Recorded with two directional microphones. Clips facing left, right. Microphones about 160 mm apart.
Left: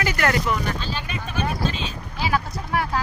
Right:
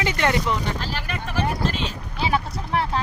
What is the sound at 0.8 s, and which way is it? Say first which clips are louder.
Speech: even; 85° right.